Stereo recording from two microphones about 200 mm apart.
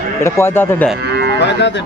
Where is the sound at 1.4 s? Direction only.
60° left (ahead or behind).